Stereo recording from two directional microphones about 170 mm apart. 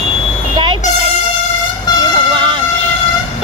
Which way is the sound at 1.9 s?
25° left (ahead or behind).